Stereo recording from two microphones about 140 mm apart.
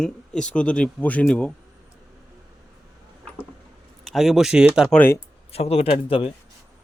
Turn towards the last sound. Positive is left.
turn(degrees=40)  # may be behind; listen again after turning